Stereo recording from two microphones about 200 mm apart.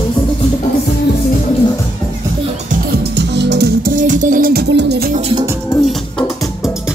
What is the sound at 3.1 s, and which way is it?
Music, 60° right (ahead or behind).